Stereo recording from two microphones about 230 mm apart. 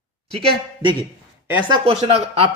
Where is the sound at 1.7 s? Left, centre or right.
Right.